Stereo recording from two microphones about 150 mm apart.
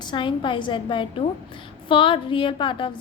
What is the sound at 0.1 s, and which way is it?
A woman's voice, 30° left (ahead or behind).